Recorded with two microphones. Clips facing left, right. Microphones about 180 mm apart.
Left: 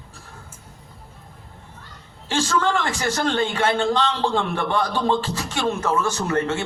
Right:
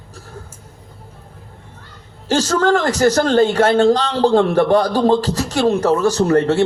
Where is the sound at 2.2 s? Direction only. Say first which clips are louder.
Right 6 dB; 40° right (ahead or behind).